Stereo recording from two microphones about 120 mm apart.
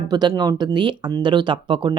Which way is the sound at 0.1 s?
35° right (ahead or behind).